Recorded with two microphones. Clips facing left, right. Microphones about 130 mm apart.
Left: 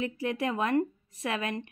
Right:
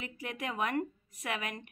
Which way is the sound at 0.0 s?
30° left (ahead or behind).